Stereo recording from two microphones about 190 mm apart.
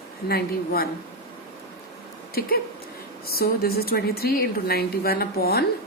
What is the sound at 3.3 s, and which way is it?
A woman's voice, 55° left (ahead or behind).